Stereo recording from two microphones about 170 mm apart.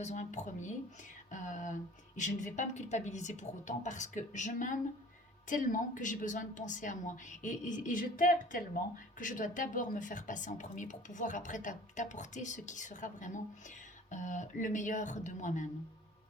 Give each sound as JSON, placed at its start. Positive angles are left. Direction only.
{"t": 0.0, "sound": "a woman's voice", "side_deg": 45}